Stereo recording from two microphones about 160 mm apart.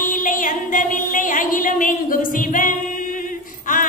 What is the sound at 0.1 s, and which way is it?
Music, 60° left (ahead or behind).